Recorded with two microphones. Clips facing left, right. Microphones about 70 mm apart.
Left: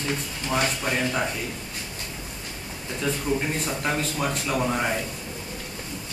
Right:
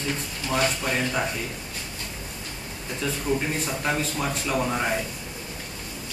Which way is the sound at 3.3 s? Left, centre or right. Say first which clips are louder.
Right 3 dB; centre.